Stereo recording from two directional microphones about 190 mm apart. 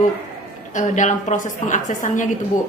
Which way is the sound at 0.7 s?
40° left (ahead or behind).